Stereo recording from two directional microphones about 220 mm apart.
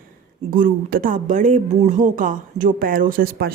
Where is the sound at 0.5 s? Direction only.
40° right (ahead or behind).